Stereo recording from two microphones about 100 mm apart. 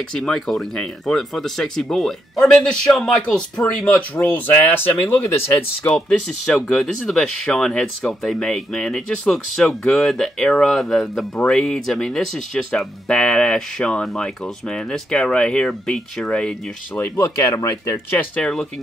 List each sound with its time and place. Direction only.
0.1 s speech: 5° left (ahead or behind)
4.3 s speech: 20° left (ahead or behind)
5.9 s speech: 5° left (ahead or behind)
17.0 s speech: 30° left (ahead or behind)
18.3 s speech: 10° left (ahead or behind)